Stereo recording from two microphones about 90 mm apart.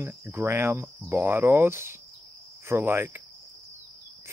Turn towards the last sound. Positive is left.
turn(degrees=-25)  # may be behind; listen again after turning